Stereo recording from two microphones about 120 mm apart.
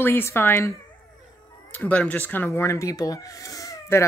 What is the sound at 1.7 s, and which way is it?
Speech, 10° left (ahead or behind).